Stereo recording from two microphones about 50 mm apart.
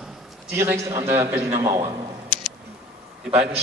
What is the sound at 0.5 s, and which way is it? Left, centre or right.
Speech, right.